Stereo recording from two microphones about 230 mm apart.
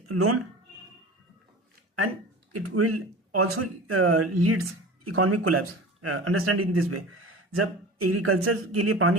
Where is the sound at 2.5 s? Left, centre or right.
Right.